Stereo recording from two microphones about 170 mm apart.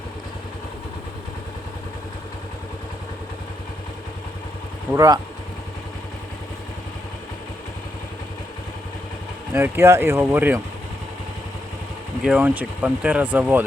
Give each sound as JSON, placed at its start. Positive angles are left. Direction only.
{"t": 4.9, "sound": "speech", "side_deg": -20}
{"t": 9.5, "sound": "speech", "side_deg": -15}
{"t": 12.2, "sound": "speech", "side_deg": -5}